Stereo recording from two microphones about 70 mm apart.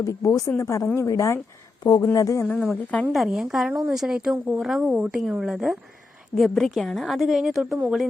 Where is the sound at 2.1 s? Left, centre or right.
Left.